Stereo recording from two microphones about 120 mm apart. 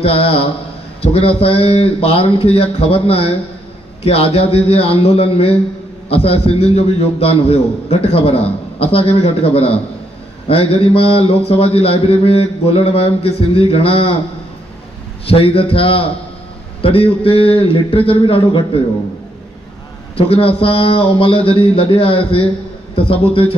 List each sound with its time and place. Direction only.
0.0 s a man's voice: 55° left (ahead or behind)
15.2 s a man's voice: 50° left (ahead or behind)
20.2 s a man's voice: 50° left (ahead or behind)